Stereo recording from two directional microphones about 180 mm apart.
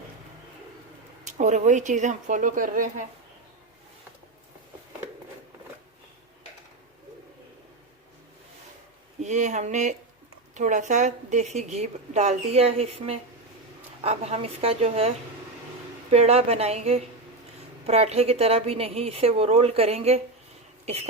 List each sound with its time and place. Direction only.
1.3 s a woman's voice: 40° right (ahead or behind)
9.2 s a woman's voice: 40° right (ahead or behind)